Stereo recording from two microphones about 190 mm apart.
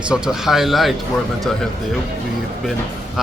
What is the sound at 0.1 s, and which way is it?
Speech, centre (ahead or behind).